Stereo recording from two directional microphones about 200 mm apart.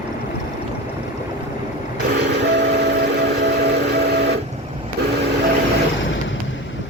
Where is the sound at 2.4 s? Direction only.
60° right (ahead or behind).